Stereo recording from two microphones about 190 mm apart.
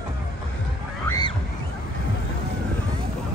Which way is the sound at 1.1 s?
20° left (ahead or behind).